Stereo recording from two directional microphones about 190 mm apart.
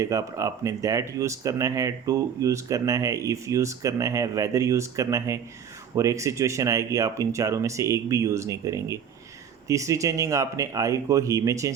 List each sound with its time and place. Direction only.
0.0 s speech: 15° right (ahead or behind)